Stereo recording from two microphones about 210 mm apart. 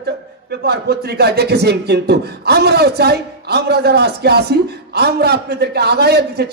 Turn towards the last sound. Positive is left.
turn(degrees=-50)  # may be behind; listen again after turning